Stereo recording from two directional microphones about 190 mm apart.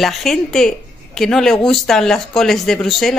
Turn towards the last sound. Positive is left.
turn(degrees=0)  # may be behind; listen again after turning